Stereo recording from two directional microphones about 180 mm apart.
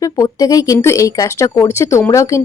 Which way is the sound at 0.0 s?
20° left (ahead or behind).